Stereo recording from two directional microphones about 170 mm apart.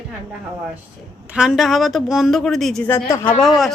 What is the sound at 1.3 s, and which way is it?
A woman's voice, 5° right (ahead or behind).